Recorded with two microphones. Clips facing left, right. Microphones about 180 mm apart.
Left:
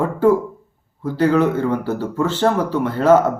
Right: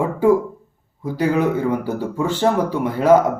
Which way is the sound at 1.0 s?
10° right (ahead or behind).